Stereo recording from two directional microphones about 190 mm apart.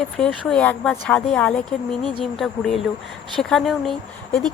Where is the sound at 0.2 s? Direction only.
5° left (ahead or behind).